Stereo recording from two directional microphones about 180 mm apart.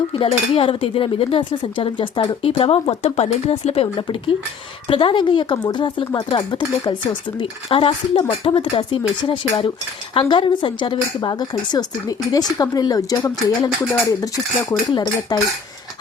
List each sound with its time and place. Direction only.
0.1 s speech: 30° left (ahead or behind)